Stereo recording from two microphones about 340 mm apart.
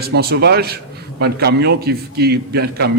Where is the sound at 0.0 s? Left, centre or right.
Right.